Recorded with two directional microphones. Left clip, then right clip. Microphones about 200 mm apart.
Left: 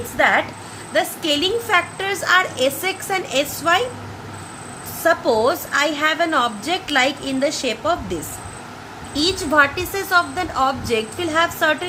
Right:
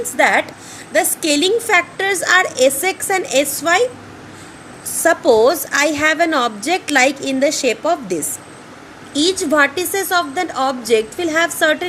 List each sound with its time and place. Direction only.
0.2 s a woman's voice: 45° right (ahead or behind)
5.0 s a woman's voice: 40° right (ahead or behind)